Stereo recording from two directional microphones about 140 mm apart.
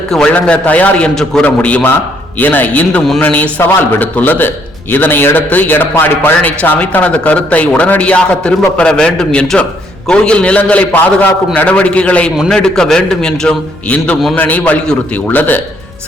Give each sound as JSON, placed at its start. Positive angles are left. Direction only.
{"t": 0.1, "sound": "a man's voice", "side_deg": 5}